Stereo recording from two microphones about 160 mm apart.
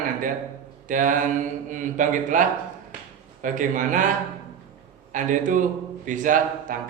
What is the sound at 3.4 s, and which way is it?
Speech, 55° right (ahead or behind).